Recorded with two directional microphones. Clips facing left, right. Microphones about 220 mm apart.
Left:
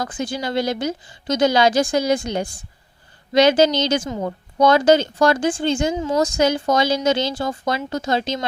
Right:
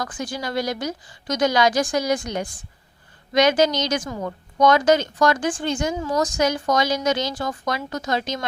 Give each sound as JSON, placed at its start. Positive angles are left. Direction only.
{"t": 0.0, "sound": "a woman's voice", "side_deg": 25}